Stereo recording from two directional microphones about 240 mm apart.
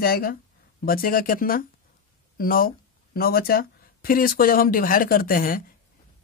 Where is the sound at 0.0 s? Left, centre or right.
Left.